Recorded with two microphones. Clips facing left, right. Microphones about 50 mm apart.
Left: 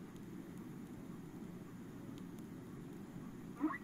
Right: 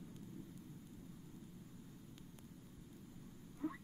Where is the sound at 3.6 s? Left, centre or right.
Left.